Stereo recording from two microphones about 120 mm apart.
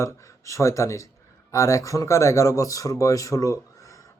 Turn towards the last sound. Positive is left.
turn(degrees=25)  # may be behind; listen again after turning